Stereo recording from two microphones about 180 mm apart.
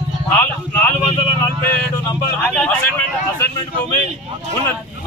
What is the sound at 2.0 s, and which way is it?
Speech, 10° left (ahead or behind).